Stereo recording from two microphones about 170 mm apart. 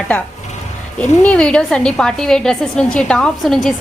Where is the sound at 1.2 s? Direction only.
5° left (ahead or behind).